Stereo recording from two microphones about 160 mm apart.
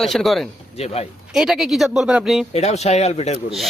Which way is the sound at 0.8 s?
40° left (ahead or behind).